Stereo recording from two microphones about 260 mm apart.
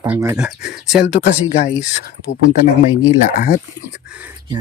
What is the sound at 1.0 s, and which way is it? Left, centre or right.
Speech, left.